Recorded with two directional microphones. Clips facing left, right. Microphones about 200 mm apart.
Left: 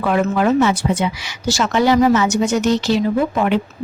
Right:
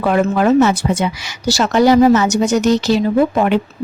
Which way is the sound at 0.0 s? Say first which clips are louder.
Right 2 dB; 40° right (ahead or behind).